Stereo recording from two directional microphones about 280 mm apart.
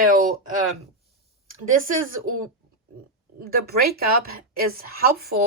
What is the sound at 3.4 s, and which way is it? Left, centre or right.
Speech, right.